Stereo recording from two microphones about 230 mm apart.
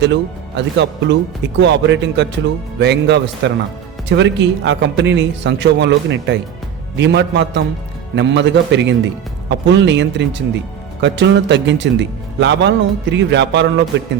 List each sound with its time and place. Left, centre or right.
0.0 s a man's voice: right